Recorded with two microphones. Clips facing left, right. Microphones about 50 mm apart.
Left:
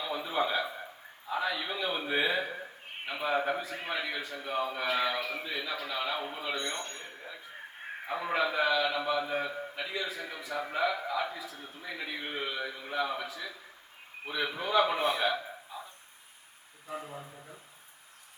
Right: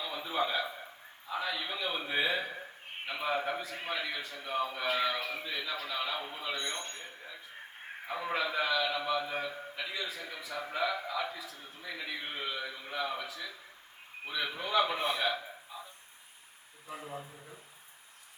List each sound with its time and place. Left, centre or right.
0.0 s a sound: centre
3.1 s a man's voice: centre
6.7 s speech: left
8.0 s a man's voice: centre
11.4 s speech: left
11.8 s a man's voice: centre
17.0 s a man's voice: centre